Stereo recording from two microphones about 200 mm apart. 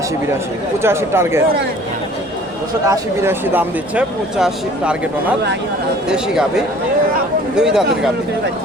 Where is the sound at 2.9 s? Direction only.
10° right (ahead or behind).